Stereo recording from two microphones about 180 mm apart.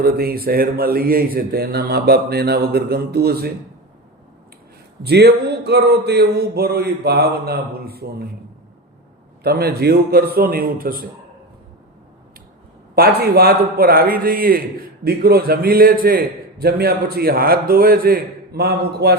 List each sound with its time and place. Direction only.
0.0 s speech: 60° right (ahead or behind)
5.0 s speech: 65° right (ahead or behind)
9.4 s speech: 60° right (ahead or behind)
13.0 s speech: 60° right (ahead or behind)